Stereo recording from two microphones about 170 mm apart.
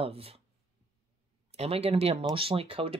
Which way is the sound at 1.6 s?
35° right (ahead or behind).